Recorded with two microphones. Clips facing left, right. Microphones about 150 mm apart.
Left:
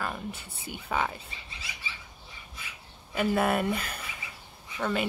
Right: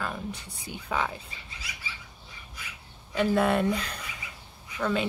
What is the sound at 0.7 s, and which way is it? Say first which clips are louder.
Speech: even; 5° left (ahead or behind).